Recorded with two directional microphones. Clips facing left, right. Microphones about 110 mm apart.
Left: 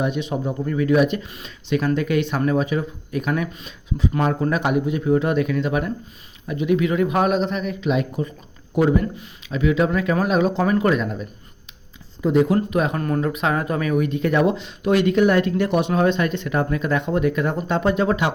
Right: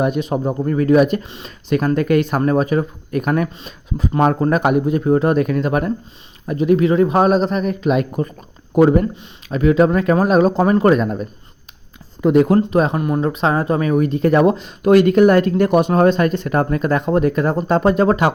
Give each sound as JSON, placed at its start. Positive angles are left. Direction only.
{"t": 0.0, "sound": "speech", "side_deg": -45}
{"t": 1.2, "sound": "speech", "side_deg": -30}
{"t": 1.7, "sound": "speech", "side_deg": -45}
{"t": 12.2, "sound": "speech", "side_deg": -60}
{"t": 12.5, "sound": "speech", "side_deg": -30}
{"t": 13.0, "sound": "speech", "side_deg": -15}
{"t": 13.2, "sound": "speech", "side_deg": -30}